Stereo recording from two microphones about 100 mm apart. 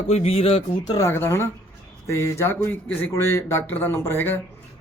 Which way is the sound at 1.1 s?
25° left (ahead or behind).